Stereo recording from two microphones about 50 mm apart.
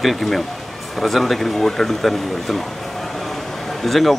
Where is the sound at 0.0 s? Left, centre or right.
Centre.